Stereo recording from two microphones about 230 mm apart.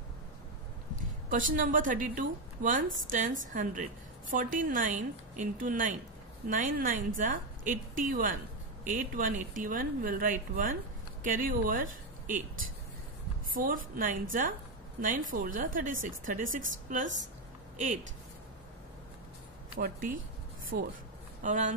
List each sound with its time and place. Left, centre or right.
1.3 s a woman's voice: right
19.8 s a woman's voice: right
21.4 s speech: right